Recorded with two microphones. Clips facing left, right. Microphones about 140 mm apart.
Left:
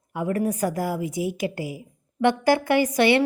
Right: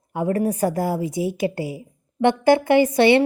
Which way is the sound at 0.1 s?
30° right (ahead or behind).